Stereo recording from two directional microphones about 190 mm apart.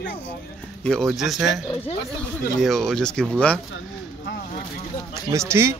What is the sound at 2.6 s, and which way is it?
Speech, centre (ahead or behind).